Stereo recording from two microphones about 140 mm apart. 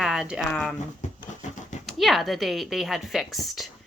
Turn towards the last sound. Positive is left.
turn(degrees=0)  # may be behind; listen again after turning